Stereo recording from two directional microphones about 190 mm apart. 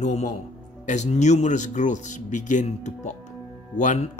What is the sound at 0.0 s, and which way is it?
Speech, 40° left (ahead or behind).